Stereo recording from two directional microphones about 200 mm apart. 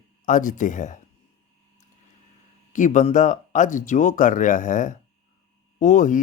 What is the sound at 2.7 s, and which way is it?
Speech, 40° left (ahead or behind).